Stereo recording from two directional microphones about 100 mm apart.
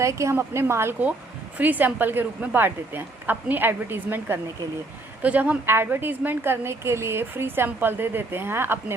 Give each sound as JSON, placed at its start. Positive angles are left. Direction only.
{"t": 0.0, "sound": "a woman's voice", "side_deg": -30}